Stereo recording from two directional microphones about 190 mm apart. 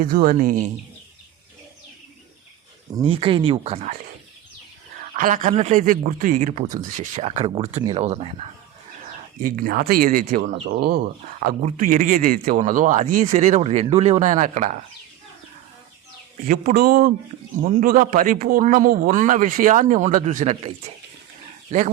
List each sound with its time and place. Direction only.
0.0 s a man's voice: 45° right (ahead or behind)
3.0 s speech: 30° right (ahead or behind)
5.1 s speech: 45° right (ahead or behind)
9.4 s a man's voice: 45° right (ahead or behind)
16.4 s a man's voice: 45° right (ahead or behind)